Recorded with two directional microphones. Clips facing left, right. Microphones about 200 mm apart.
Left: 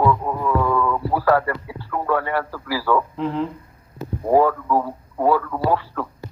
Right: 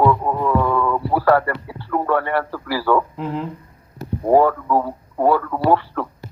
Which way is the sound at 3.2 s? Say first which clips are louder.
Left 2 dB; 5° right (ahead or behind).